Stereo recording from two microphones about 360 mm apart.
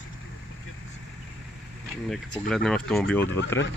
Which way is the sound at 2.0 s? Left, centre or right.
Centre.